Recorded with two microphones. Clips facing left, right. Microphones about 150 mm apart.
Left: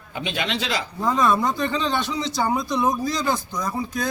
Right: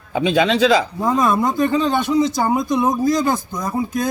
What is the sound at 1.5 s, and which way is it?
Speech, 45° right (ahead or behind).